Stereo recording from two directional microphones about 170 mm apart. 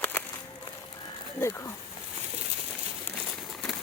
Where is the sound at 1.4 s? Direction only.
15° left (ahead or behind).